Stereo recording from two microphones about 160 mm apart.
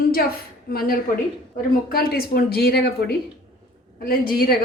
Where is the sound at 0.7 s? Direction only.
70° left (ahead or behind).